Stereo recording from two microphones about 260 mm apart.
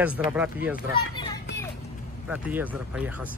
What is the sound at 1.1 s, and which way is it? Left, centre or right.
Children playing, centre.